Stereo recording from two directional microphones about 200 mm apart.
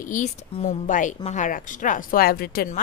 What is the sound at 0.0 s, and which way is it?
A woman's voice, 40° left (ahead or behind).